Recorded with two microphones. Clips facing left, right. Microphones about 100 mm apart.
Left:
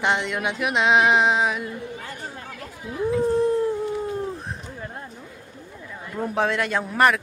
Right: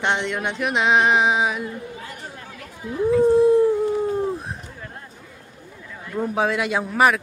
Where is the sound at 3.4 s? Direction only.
15° right (ahead or behind).